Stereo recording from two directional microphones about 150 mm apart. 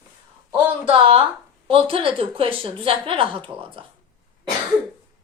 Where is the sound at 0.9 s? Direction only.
40° right (ahead or behind).